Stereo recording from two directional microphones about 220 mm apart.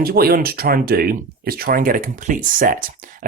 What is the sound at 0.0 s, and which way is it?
Speech, 45° right (ahead or behind).